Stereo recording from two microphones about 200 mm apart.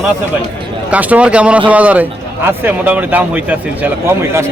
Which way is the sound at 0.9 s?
5° right (ahead or behind).